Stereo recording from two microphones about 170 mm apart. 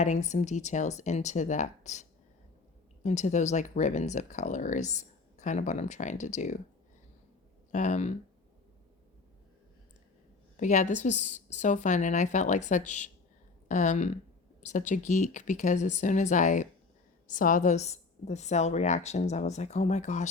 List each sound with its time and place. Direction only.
0.0 s a woman's voice: 45° left (ahead or behind)
7.7 s a woman's voice: 45° left (ahead or behind)
10.6 s a woman's voice: 45° left (ahead or behind)